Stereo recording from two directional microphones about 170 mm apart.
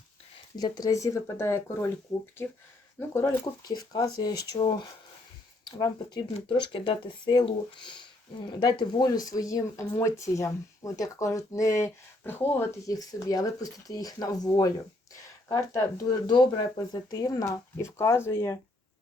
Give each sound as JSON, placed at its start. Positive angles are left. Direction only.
{"t": 0.5, "sound": "speech", "side_deg": 20}
{"t": 3.1, "sound": "speech", "side_deg": 20}
{"t": 5.6, "sound": "speech", "side_deg": 25}